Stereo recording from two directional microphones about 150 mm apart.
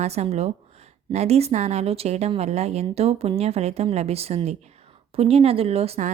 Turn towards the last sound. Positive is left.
turn(degrees=-45)  # may be behind; listen again after turning